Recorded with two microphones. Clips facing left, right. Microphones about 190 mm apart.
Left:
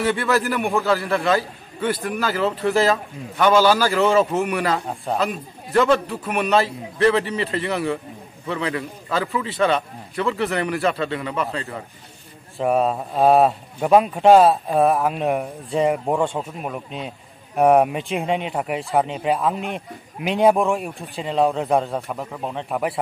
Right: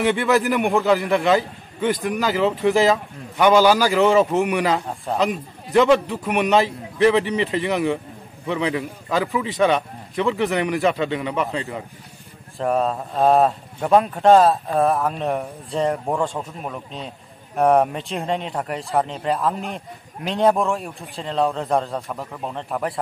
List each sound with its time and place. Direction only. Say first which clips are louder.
0.0 s a man's voice: right 2 dB; 15° right (ahead or behind)
4.8 s speech: left 1 dB; centre (ahead or behind)
5.2 s a man's voice: right 2 dB; 15° right (ahead or behind)
12.6 s a man's voice: left 1 dB; 15° left (ahead or behind)